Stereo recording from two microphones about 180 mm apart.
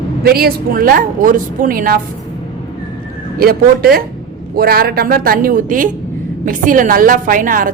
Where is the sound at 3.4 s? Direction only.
55° right (ahead or behind).